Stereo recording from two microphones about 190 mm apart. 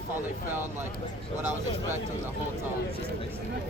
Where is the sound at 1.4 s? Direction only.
10° right (ahead or behind).